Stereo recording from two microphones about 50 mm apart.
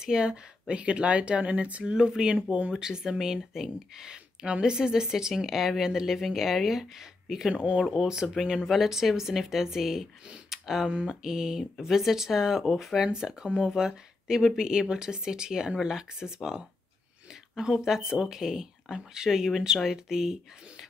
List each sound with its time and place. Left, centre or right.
0.0 s speech: centre
7.5 s speech: right
7.9 s speech: centre